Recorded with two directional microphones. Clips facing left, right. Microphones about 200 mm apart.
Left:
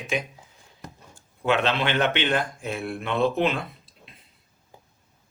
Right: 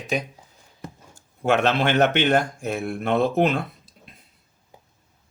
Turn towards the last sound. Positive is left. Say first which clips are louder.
# right 3 dB
turn(degrees=-45)  # may be behind; listen again after turning